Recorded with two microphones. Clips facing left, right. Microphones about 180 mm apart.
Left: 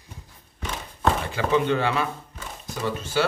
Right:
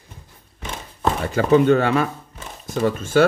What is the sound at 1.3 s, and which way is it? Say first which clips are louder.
Speech: right 12 dB; 45° right (ahead or behind).